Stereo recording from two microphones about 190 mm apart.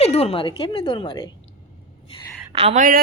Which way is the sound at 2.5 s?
30° right (ahead or behind).